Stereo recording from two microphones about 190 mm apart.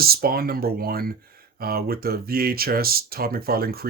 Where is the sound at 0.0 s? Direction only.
50° right (ahead or behind).